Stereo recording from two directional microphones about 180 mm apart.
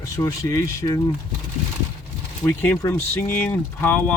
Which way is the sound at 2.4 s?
10° left (ahead or behind).